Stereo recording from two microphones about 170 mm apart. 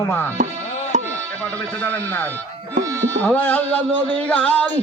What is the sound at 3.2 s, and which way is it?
Carnatic music, 10° left (ahead or behind).